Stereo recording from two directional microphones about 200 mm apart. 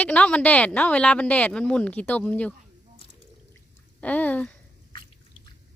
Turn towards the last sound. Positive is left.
turn(degrees=5)  # may be behind; listen again after turning